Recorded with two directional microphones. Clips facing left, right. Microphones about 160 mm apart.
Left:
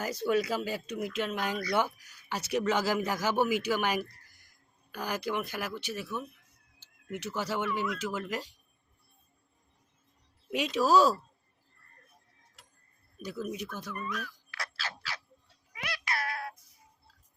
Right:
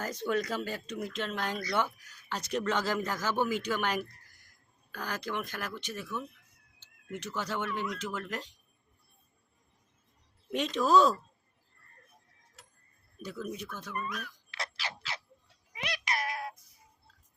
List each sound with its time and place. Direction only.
0.0 s speech: 10° left (ahead or behind)
10.5 s speech: 5° left (ahead or behind)
13.2 s speech: 10° left (ahead or behind)
14.5 s a sound: 20° right (ahead or behind)
15.7 s meow: 20° right (ahead or behind)